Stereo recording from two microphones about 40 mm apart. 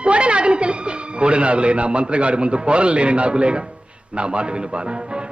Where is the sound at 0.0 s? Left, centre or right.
Right.